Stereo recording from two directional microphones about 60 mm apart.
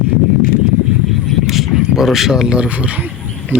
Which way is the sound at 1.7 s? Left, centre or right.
Centre.